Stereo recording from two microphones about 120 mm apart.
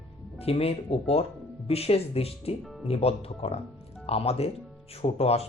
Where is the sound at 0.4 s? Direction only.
55° left (ahead or behind).